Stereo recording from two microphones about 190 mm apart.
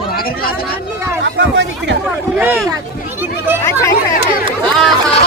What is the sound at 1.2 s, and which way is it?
Speech, 70° right (ahead or behind).